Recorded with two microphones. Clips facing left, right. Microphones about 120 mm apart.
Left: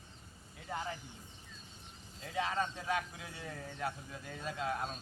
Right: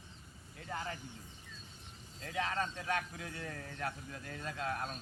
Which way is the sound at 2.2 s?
5° left (ahead or behind).